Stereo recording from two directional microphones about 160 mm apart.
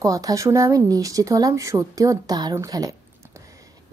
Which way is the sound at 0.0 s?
20° right (ahead or behind).